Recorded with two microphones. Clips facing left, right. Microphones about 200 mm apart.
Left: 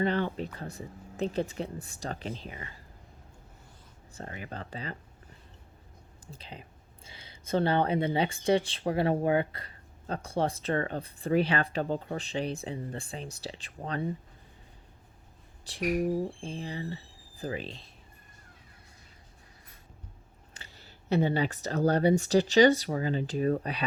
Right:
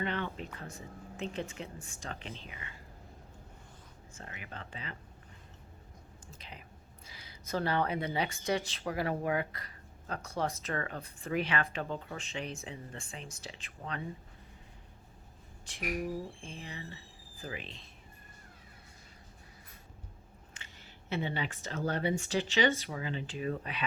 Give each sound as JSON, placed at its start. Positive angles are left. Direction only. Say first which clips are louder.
{"t": 0.0, "sound": "speech", "louder": "left 7 dB", "side_deg": 35}
{"t": 4.1, "sound": "speech", "louder": "left 7 dB", "side_deg": 35}
{"t": 6.3, "sound": "speech", "louder": "left 6 dB", "side_deg": 30}
{"t": 15.6, "sound": "speech", "louder": "left 8 dB", "side_deg": 35}
{"t": 20.5, "sound": "speech", "louder": "left 4 dB", "side_deg": 35}